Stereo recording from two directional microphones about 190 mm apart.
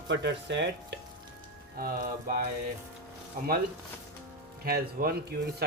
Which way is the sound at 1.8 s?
50° right (ahead or behind).